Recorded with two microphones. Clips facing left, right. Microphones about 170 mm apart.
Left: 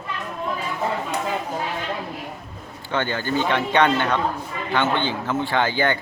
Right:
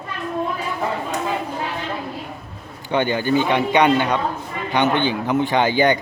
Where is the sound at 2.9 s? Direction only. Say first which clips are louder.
Right 5 dB; 15° right (ahead or behind).